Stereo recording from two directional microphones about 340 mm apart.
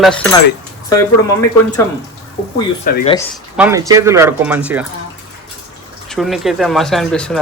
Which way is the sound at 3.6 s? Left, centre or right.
Centre.